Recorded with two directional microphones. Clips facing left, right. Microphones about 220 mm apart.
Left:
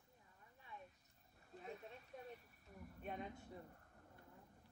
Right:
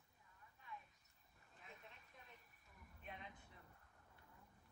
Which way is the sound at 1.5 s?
40° left (ahead or behind).